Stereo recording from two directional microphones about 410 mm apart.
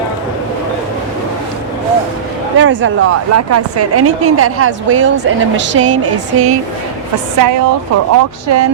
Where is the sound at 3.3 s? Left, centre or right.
Right.